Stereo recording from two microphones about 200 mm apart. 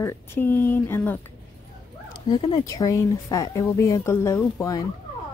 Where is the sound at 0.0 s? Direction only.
10° left (ahead or behind).